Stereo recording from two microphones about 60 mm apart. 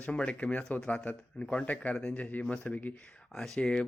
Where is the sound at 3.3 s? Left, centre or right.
Centre.